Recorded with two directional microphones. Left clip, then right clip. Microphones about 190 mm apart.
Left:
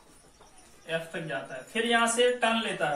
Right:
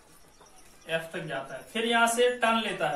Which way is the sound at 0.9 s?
15° right (ahead or behind).